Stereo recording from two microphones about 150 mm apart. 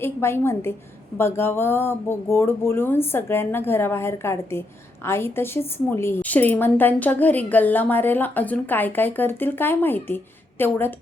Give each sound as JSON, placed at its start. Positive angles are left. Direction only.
{"t": 0.0, "sound": "a woman's voice", "side_deg": 15}